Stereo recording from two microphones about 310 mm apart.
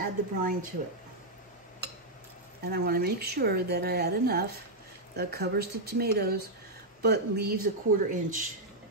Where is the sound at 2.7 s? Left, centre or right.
Right.